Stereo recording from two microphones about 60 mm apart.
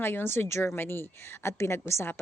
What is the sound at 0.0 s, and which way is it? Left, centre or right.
A woman's voice, left.